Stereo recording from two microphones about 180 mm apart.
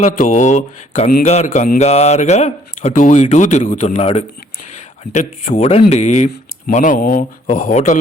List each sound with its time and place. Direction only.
0.0 s speech: 45° left (ahead or behind)
5.5 s speech: 35° left (ahead or behind)